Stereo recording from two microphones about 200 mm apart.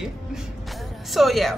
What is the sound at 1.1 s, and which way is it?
Speech, centre (ahead or behind).